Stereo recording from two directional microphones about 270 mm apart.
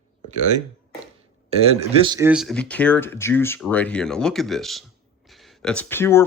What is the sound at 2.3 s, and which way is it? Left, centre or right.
Speech, centre.